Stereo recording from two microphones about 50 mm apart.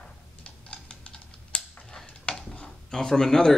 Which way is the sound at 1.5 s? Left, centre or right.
Left.